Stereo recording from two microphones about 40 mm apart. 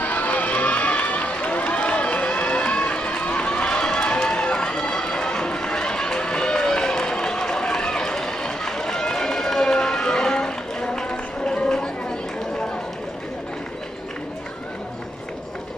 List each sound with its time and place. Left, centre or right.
0.0 s run: left